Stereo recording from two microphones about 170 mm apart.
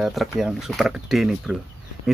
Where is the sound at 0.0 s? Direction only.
Centre (ahead or behind).